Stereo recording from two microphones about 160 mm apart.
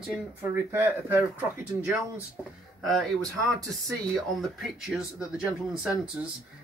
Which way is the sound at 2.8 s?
Centre (ahead or behind).